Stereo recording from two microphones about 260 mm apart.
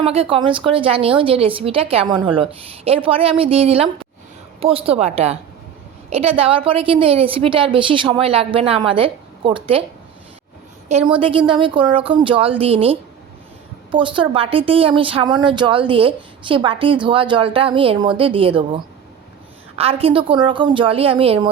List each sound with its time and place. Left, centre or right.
0.0 s a woman's voice: right
11.1 s a woman's voice: centre